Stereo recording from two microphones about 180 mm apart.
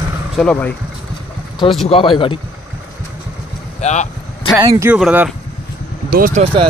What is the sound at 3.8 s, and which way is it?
Speech, 40° left (ahead or behind).